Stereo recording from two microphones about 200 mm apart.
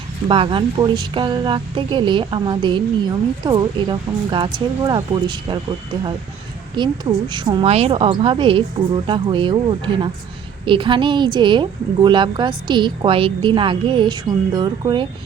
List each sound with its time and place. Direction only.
0.3 s a woman's voice: 25° right (ahead or behind)